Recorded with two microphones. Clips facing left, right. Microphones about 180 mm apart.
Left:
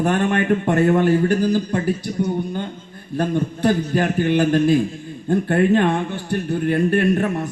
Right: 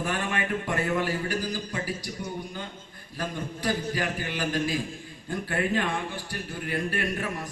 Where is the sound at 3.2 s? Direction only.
55° left (ahead or behind).